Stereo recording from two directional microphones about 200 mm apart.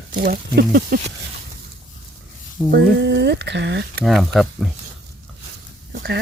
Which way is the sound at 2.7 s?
55° right (ahead or behind).